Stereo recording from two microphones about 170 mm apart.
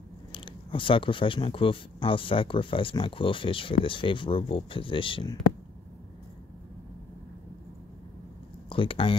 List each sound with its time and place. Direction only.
0.3 s speech: 30° left (ahead or behind)
8.6 s speech: 30° left (ahead or behind)